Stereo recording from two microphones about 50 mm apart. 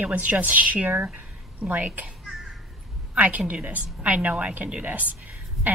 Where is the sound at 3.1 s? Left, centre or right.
Right.